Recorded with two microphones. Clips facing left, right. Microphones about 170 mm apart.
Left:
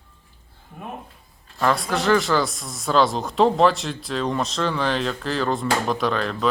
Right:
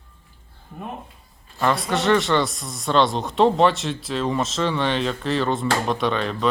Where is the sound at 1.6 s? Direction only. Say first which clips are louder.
Even; centre (ahead or behind).